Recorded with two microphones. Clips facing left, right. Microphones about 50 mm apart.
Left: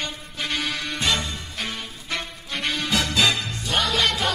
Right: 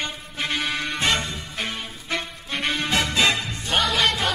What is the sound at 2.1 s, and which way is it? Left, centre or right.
Music, centre.